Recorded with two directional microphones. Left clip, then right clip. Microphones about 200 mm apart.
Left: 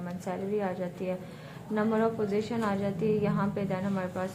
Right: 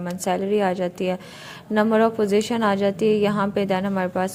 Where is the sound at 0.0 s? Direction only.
40° right (ahead or behind).